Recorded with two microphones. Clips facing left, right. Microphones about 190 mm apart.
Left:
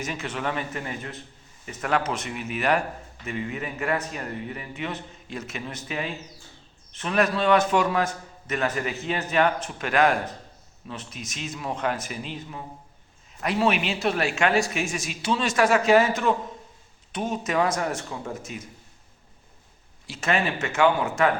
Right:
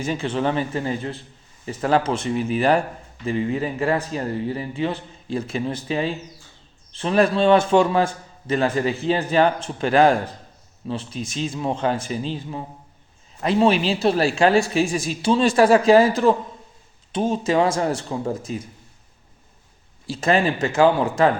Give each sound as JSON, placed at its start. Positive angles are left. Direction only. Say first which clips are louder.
{"t": 0.0, "sound": "a man's voice", "louder": "right 7 dB", "side_deg": -30}
{"t": 20.1, "sound": "a man's voice", "louder": "right 6 dB", "side_deg": -35}